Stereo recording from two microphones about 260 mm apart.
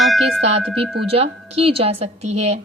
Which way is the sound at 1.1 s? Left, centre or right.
Right.